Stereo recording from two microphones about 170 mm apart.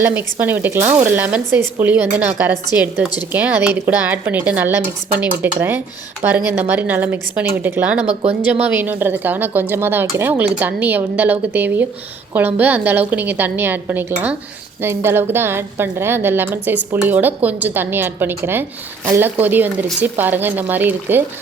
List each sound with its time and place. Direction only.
0.0 s a woman's voice: 10° right (ahead or behind)
8.0 s speech: 40° right (ahead or behind)
8.7 s a woman's voice: 10° right (ahead or behind)